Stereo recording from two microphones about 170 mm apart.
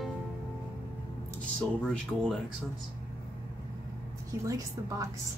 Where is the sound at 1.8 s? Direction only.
5° left (ahead or behind).